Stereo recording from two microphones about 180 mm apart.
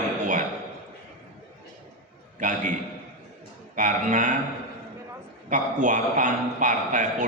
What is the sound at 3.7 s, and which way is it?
Speech, 45° right (ahead or behind).